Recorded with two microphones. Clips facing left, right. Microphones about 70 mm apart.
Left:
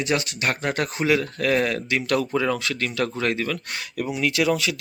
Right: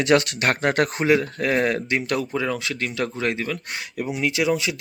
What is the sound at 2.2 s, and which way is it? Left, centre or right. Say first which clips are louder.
Speech: left 2 dB; centre.